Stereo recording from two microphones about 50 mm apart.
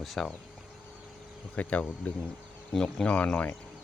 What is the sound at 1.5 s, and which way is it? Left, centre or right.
Speech, left.